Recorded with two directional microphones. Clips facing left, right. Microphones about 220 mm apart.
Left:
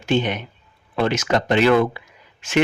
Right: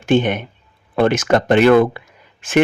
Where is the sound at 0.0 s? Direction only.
50° right (ahead or behind).